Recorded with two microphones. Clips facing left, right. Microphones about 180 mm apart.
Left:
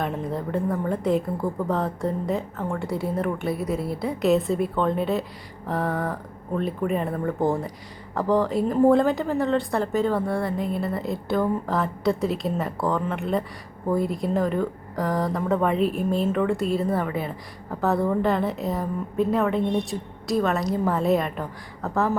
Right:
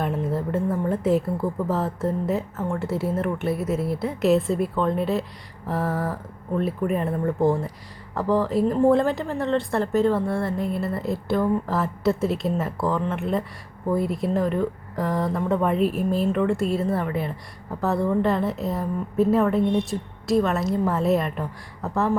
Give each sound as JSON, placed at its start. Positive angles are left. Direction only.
{"t": 0.0, "sound": "speech", "side_deg": -5}